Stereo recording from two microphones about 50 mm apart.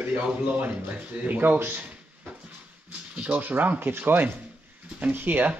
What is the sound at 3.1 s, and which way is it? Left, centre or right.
Speech, right.